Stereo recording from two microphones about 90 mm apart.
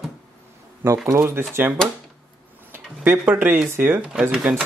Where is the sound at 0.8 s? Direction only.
30° right (ahead or behind).